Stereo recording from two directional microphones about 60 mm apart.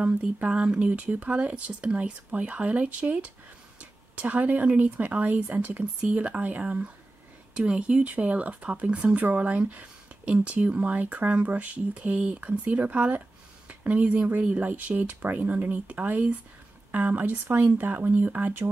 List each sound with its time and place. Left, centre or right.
0.4 s speech: right